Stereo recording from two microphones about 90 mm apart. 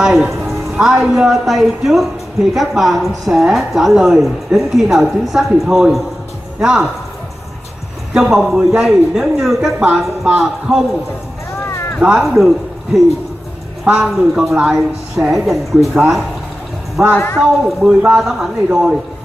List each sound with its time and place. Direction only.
0.0 s a man's voice: 5° right (ahead or behind)
8.1 s a woman's voice: 5° right (ahead or behind)
9.8 s a man's voice: 15° right (ahead or behind)
11.6 s a sound: 30° left (ahead or behind)
12.0 s a man's voice: 5° right (ahead or behind)
17.0 s a man's voice: 15° right (ahead or behind)